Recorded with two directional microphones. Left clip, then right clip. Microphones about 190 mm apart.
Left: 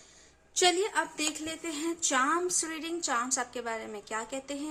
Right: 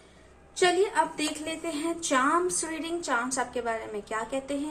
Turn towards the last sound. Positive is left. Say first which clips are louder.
# right 5 dB
turn(degrees=30)  # may be behind; listen again after turning